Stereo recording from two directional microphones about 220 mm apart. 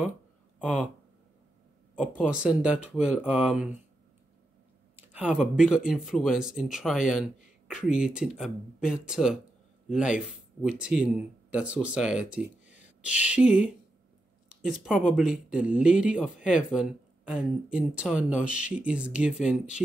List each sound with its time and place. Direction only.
0.6 s speech: 5° right (ahead or behind)
2.0 s speech: 5° right (ahead or behind)
4.9 s speech: 10° right (ahead or behind)